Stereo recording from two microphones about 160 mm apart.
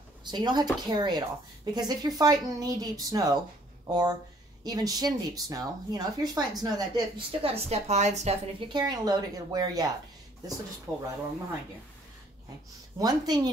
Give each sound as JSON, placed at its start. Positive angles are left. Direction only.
{"t": 0.2, "sound": "speech", "side_deg": -25}
{"t": 8.7, "sound": "speech", "side_deg": -25}
{"t": 10.9, "sound": "speech", "side_deg": 0}
{"t": 13.0, "sound": "speech", "side_deg": -25}